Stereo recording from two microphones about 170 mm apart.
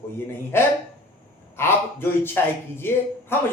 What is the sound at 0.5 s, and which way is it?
Speech, 15° left (ahead or behind).